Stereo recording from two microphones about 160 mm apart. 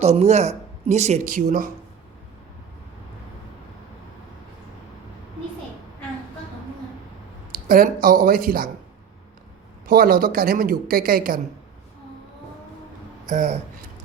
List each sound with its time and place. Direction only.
0.0 s speech: 45° right (ahead or behind); by 1.7 s 60° right (ahead or behind)
7.7 s speech: 65° right (ahead or behind)
9.8 s speech: 65° right (ahead or behind)
13.2 s speech: 55° right (ahead or behind)